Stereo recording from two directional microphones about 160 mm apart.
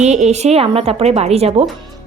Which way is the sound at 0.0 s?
45° right (ahead or behind).